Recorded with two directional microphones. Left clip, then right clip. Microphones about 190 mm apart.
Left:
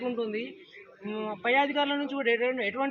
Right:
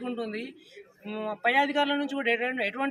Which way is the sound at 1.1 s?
25° right (ahead or behind).